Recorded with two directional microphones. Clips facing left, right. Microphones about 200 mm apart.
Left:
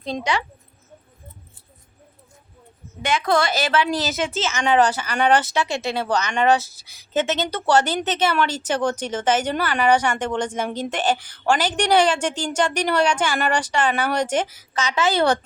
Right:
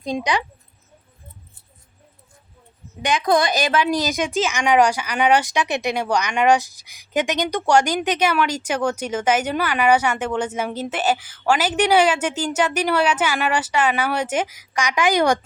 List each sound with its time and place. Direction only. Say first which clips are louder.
0.0 s a woman's voice: right 2 dB; 15° right (ahead or behind)
3.0 s a woman's voice: right 2 dB; 15° right (ahead or behind)